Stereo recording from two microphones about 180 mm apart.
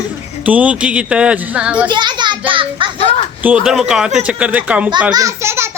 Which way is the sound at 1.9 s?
25° right (ahead or behind).